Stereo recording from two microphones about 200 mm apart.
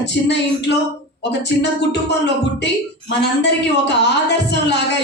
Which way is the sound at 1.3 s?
60° left (ahead or behind).